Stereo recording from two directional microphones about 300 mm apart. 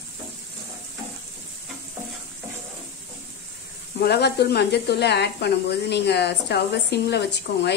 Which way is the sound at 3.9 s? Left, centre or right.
Left.